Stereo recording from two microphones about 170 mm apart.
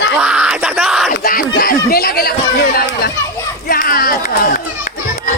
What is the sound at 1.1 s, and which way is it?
Speech, 60° left (ahead or behind).